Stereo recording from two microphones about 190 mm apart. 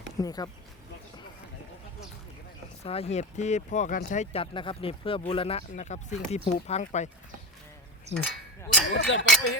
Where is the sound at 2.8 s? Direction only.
30° left (ahead or behind).